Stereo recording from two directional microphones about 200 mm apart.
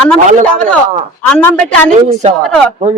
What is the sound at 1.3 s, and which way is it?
Speech, 5° left (ahead or behind).